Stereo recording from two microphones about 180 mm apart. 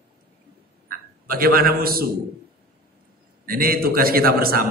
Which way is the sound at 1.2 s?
55° right (ahead or behind).